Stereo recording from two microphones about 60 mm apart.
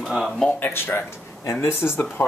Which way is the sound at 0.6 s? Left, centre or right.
Left.